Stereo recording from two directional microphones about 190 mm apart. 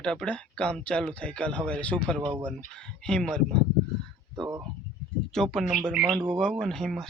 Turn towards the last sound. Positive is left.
turn(degrees=0)  # may be behind; listen again after turning